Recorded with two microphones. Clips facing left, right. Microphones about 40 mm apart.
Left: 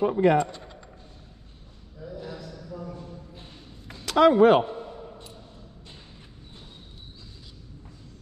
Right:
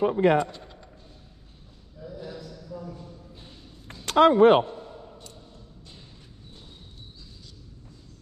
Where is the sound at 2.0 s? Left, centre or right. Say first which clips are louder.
Left 1 dB; centre.